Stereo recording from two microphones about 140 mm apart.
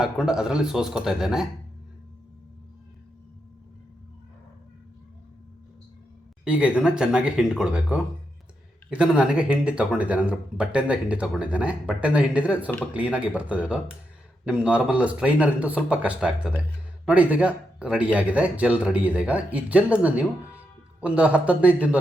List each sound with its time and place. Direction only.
0.0 s a man's voice: 5° right (ahead or behind)
6.4 s speech: 10° right (ahead or behind)